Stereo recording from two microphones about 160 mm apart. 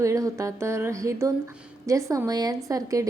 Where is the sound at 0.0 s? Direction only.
20° right (ahead or behind).